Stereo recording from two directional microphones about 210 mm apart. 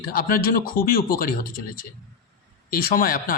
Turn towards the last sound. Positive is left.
turn(degrees=40)  # may be behind; listen again after turning